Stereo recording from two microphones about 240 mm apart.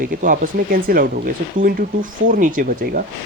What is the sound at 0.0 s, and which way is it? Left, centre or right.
Speech, right.